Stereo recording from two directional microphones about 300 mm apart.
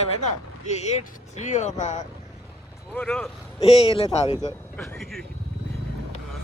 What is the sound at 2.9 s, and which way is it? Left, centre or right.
Speech, centre.